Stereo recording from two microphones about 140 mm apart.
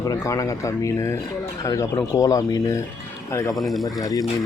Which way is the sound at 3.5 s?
Centre (ahead or behind).